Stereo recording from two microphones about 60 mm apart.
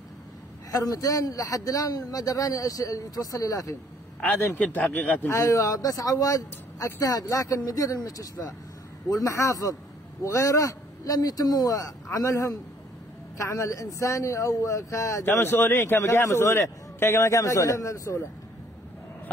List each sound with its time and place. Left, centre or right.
0.7 s a man's voice: left
4.3 s a man's voice: left
5.3 s a man's voice: left
15.4 s a man's voice: left
16.0 s a man's voice: left